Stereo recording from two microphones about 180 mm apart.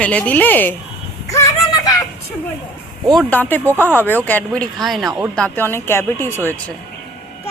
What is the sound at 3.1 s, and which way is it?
Speech, 10° left (ahead or behind).